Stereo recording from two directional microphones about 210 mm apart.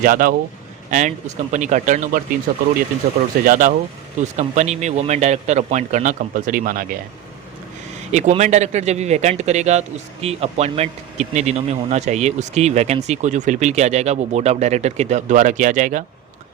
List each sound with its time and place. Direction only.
0.0 s speech: 40° right (ahead or behind)
8.1 s speech: 35° right (ahead or behind)